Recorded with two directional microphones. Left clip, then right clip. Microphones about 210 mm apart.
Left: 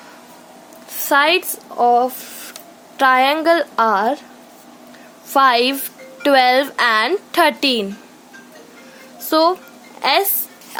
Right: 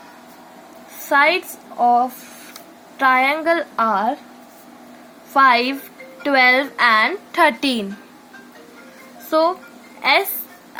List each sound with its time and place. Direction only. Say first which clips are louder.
1.1 s a woman's voice: left 1 dB; 50° left (ahead or behind)
5.3 s a woman's voice: left 1 dB; 50° left (ahead or behind)
9.3 s a woman's voice: left 2 dB; 50° left (ahead or behind)